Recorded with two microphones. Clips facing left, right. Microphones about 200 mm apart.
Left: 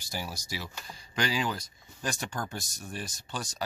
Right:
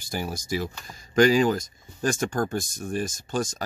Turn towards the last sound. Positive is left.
turn(degrees=-45)  # may be behind; listen again after turning